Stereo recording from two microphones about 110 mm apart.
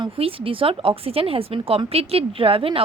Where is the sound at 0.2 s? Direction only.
55° right (ahead or behind).